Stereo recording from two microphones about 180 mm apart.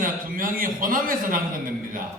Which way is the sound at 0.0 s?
50° right (ahead or behind).